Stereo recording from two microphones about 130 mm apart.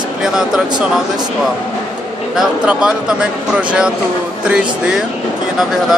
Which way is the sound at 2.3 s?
5° right (ahead or behind).